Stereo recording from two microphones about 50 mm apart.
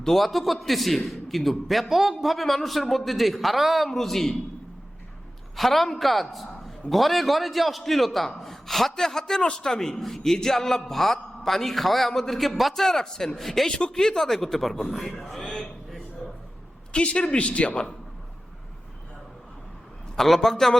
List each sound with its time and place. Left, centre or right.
0.0 s a man's voice: centre
5.5 s a man's voice: centre
13.7 s a man's voice: centre
15.5 s a sound: centre
16.9 s a man's voice: left
20.1 s a man's voice: centre